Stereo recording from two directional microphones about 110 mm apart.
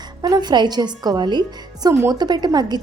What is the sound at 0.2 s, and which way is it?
A woman's voice, 40° right (ahead or behind).